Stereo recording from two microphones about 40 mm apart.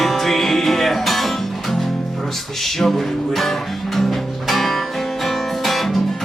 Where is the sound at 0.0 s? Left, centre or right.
Centre.